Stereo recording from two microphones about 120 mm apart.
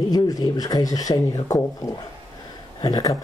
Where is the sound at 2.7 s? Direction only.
30° left (ahead or behind).